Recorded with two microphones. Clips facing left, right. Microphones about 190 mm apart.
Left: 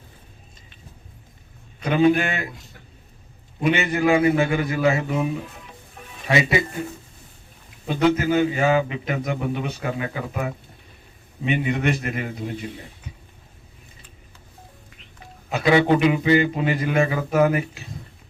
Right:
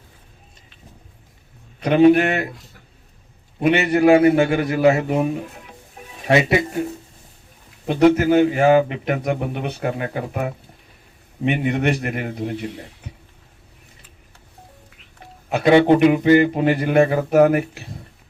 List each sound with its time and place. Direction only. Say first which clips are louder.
1.8 s speech: right 5 dB; 65° right (ahead or behind)
3.6 s speech: right 5 dB; 60° right (ahead or behind)
4.9 s speech: right 6 dB; 50° right (ahead or behind)
7.9 s speech: right 5 dB; 65° right (ahead or behind)
15.5 s speech: right 4 dB; 55° right (ahead or behind)